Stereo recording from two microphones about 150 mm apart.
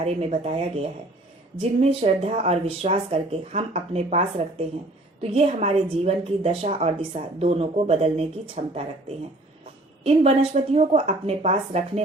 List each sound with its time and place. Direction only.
0.0 s a woman's voice: 45° right (ahead or behind)
1.8 s a woman's voice: 45° right (ahead or behind)
10.0 s a woman's voice: 45° right (ahead or behind)